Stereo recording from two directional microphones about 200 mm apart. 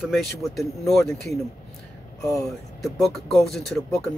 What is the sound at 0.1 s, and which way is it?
Speech, centre (ahead or behind).